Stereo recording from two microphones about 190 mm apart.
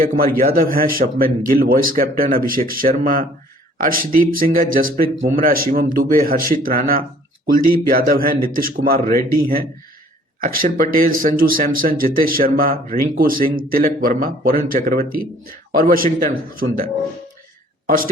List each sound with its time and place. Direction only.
0.3 s a woman's voice: 50° right (ahead or behind)